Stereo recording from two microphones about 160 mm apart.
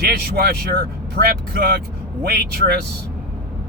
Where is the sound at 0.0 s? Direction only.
70° right (ahead or behind).